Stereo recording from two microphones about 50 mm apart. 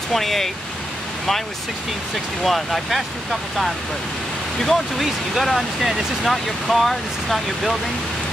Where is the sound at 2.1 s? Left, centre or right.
Centre.